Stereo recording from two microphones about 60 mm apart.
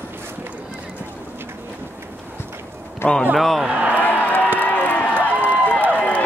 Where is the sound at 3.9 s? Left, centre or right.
Left.